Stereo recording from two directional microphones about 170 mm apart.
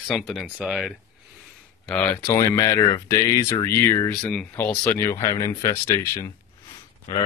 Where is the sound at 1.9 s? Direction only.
10° left (ahead or behind).